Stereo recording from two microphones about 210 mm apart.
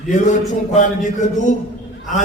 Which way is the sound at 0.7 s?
35° left (ahead or behind).